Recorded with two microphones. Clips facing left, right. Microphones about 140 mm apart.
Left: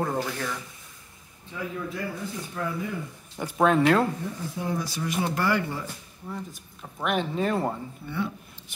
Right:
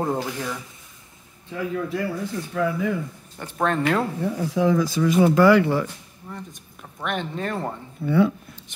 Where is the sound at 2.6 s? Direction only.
90° right.